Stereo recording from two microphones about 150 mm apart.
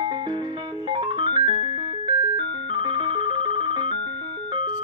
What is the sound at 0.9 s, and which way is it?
Music, 35° right (ahead or behind).